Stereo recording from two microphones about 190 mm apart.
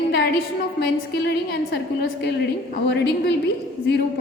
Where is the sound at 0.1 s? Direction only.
55° left (ahead or behind).